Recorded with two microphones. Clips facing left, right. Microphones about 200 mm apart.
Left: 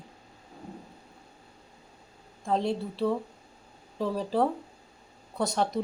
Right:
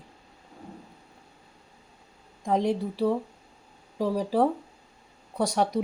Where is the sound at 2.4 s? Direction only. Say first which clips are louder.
Right 3 dB; 15° right (ahead or behind).